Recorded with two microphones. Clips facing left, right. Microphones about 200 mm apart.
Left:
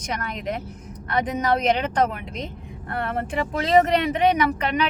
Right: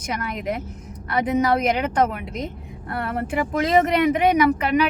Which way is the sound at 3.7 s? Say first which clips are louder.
Left 2 dB; 35° left (ahead or behind).